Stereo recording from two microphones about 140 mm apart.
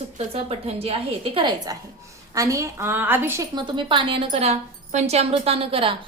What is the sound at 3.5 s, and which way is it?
A woman's voice, 35° right (ahead or behind).